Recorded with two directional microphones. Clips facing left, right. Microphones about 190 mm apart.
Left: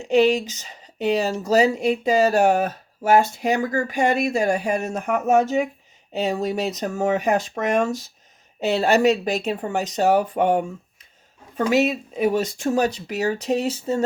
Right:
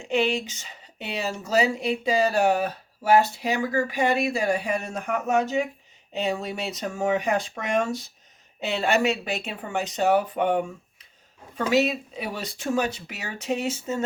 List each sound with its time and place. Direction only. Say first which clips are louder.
0.0 s speech: left 7 dB; 40° left (ahead or behind)
11.7 s speech: left 2 dB; 50° left (ahead or behind)